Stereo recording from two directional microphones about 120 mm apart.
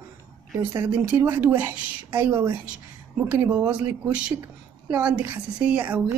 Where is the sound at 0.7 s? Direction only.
25° right (ahead or behind).